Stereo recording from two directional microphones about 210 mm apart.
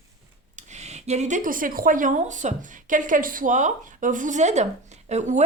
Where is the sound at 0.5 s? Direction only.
35° right (ahead or behind).